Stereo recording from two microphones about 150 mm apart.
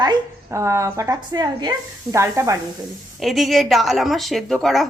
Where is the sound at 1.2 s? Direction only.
30° right (ahead or behind).